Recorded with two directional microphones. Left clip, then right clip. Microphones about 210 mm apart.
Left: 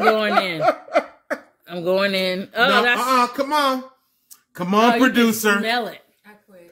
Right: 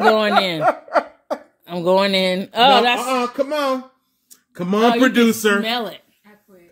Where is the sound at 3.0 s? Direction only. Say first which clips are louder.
Left 2 dB; centre (ahead or behind).